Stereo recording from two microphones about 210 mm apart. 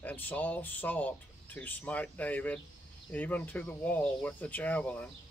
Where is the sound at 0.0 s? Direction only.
10° left (ahead or behind).